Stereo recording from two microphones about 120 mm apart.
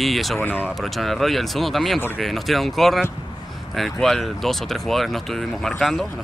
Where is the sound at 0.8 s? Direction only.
Centre (ahead or behind).